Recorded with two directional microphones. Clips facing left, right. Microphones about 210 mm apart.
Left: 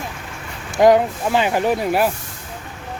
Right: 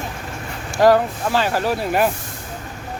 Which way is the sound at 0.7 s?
20° left (ahead or behind).